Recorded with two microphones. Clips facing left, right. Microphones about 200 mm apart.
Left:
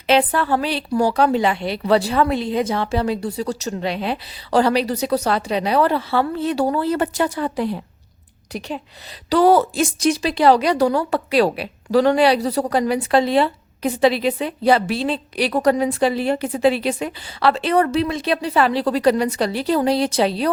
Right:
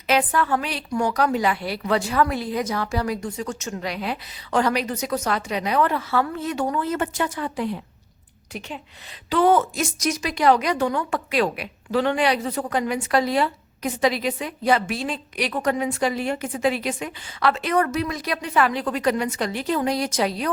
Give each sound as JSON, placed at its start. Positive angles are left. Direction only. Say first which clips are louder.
{"t": 0.1, "sound": "a woman's voice", "louder": "left 4 dB", "side_deg": 30}